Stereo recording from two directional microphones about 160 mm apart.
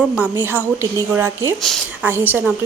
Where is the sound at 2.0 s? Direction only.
10° right (ahead or behind).